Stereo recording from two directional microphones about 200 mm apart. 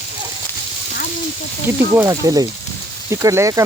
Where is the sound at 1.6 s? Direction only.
15° right (ahead or behind).